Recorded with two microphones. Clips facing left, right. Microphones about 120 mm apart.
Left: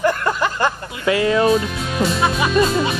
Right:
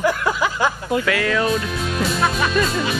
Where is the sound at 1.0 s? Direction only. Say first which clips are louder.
Left 8 dB; 25° left (ahead or behind).